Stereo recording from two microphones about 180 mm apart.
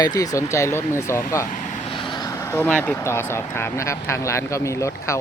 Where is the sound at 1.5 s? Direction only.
45° left (ahead or behind).